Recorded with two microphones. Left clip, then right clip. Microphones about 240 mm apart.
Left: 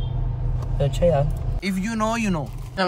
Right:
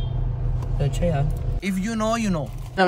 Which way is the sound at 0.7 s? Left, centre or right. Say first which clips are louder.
Left 6 dB; centre.